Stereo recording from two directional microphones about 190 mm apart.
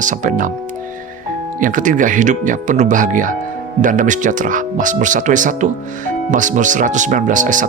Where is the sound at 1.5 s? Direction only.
45° right (ahead or behind).